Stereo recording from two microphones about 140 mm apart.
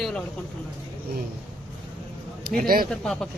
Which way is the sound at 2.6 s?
90° right.